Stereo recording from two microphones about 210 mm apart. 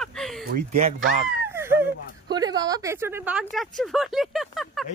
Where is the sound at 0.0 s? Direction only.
Centre (ahead or behind).